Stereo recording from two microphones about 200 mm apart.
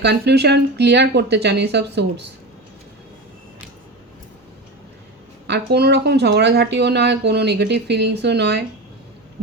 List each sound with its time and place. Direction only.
0.0 s speech: 55° right (ahead or behind)
5.5 s speech: 55° right (ahead or behind)